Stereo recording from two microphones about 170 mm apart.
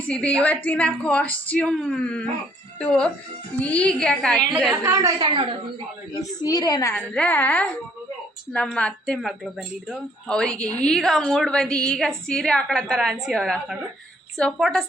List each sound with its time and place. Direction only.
0.1 s a woman's voice: 5° left (ahead or behind)
4.7 s a woman's voice: 15° right (ahead or behind)
6.4 s a woman's voice: 25° left (ahead or behind)
6.9 s a woman's voice: 10° left (ahead or behind)